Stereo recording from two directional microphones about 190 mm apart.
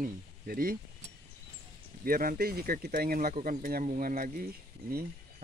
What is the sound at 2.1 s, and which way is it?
Speech, 50° right (ahead or behind).